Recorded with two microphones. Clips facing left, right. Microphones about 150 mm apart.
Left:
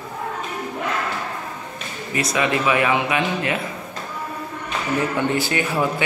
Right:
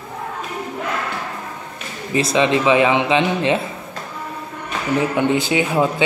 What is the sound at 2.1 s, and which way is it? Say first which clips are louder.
Speech: right 5 dB; 25° right (ahead or behind).